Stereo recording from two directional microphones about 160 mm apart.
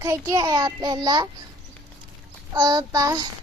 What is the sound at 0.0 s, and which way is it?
A child's voice, 20° right (ahead or behind).